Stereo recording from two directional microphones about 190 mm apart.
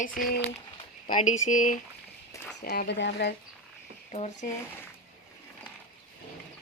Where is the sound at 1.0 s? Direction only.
40° left (ahead or behind).